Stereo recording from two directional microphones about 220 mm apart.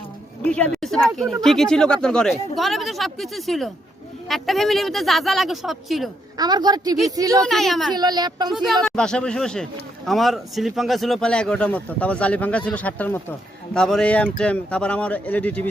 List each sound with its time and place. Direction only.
0.4 s a man's voice: 5° left (ahead or behind)
6.3 s a woman's voice: 20° right (ahead or behind)
7.4 s a man's voice: centre (ahead or behind)
7.9 s a woman's voice: 20° right (ahead or behind)
8.5 s a man's voice: centre (ahead or behind)